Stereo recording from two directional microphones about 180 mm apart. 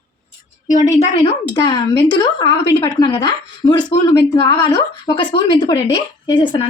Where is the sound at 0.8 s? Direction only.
35° left (ahead or behind).